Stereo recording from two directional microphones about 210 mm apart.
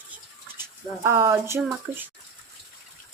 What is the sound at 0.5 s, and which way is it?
Speech, 10° right (ahead or behind).